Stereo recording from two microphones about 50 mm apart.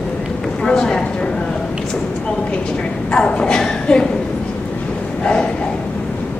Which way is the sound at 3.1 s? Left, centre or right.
Centre.